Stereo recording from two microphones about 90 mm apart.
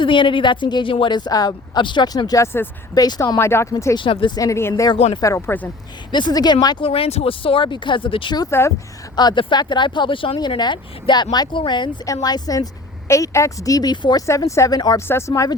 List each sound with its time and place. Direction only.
0.0 s speech: 65° left (ahead or behind); by 2.4 s 45° left (ahead or behind)
2.4 s speech: 25° left (ahead or behind)
2.9 s speech: 45° left (ahead or behind)
3.3 s speech: 30° left (ahead or behind)
3.9 s speech: 70° left (ahead or behind)
4.4 s a woman's voice: 35° left (ahead or behind)
6.1 s speech: 55° left (ahead or behind)
6.8 s speech: 90° left; by 8.4 s 70° left (ahead or behind)
8.4 s a woman's voice: 30° left (ahead or behind)
9.1 s speech: 50° left (ahead or behind)
12.0 s speech: 45° left (ahead or behind)
13.1 s a woman's voice: 35° left (ahead or behind)
13.9 s speech: 60° left (ahead or behind)
14.2 s a woman's voice: 35° left (ahead or behind)